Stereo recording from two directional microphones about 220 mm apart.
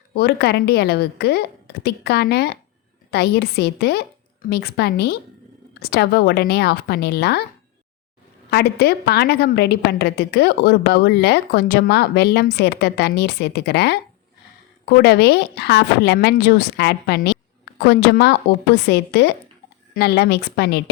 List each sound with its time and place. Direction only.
0.1 s a woman's voice: 45° left (ahead or behind)
8.4 s a woman's voice: 45° left (ahead or behind)